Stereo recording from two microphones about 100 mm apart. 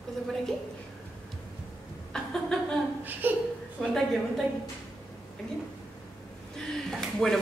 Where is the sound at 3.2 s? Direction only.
20° right (ahead or behind).